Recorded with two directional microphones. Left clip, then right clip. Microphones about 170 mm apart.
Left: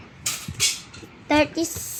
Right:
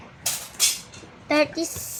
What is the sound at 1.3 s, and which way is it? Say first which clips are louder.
Speech: left 1 dB; centre (ahead or behind).